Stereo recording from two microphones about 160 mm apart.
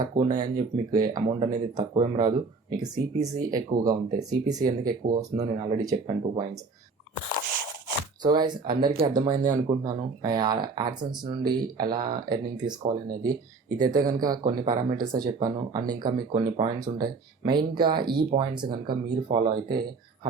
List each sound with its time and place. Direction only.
0.0 s speech: 25° right (ahead or behind)
4.8 s speech: 60° right (ahead or behind)
5.4 s speech: 20° right (ahead or behind)
8.2 s speech: 25° right (ahead or behind)